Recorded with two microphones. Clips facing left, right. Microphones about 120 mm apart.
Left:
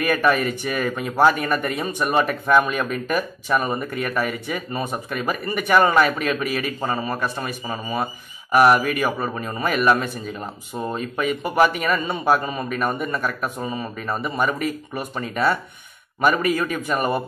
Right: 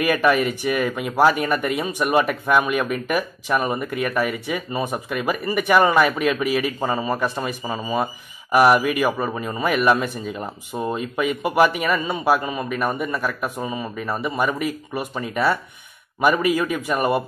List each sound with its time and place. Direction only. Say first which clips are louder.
0.0 s speech: right 1 dB; 10° right (ahead or behind)
8.5 s speech: even; 10° right (ahead or behind)